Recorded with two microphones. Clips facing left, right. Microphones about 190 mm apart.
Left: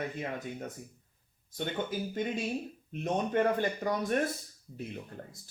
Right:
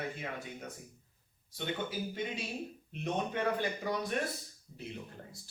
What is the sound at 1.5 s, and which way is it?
Speech, 50° left (ahead or behind).